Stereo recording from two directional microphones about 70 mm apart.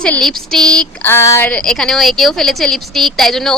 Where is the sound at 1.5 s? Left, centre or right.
Centre.